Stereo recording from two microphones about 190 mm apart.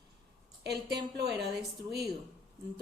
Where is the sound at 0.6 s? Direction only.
60° right (ahead or behind).